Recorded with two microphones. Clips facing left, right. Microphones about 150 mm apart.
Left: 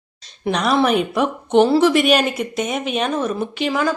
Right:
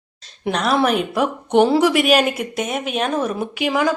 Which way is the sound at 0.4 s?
Centre (ahead or behind).